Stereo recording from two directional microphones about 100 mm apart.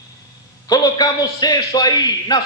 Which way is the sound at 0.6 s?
40° left (ahead or behind).